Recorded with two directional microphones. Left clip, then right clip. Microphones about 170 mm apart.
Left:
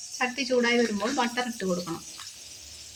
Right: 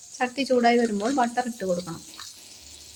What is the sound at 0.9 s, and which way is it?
Speech, 55° right (ahead or behind).